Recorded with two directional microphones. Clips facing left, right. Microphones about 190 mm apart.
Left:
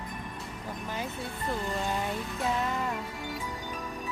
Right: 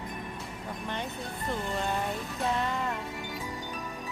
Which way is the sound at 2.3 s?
Centre (ahead or behind).